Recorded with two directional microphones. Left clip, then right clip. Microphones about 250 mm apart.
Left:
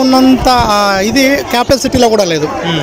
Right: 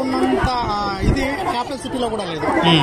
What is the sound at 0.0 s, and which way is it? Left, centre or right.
Speech, left.